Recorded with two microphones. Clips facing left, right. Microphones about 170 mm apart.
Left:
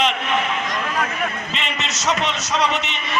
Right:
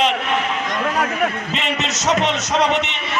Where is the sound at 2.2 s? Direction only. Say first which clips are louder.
Right 4 dB; 50° right (ahead or behind).